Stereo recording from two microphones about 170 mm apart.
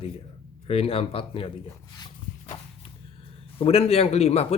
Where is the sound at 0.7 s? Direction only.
35° left (ahead or behind).